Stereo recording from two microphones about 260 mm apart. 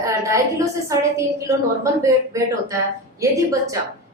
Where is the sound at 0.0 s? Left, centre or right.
Centre.